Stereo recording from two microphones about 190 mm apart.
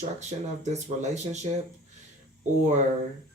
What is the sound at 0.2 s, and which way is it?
Speech, 35° right (ahead or behind).